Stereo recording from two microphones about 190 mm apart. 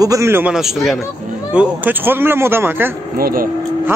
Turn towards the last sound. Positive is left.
turn(degrees=-50)  # may be behind; listen again after turning